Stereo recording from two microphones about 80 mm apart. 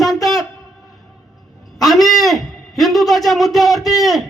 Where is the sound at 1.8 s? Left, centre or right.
Centre.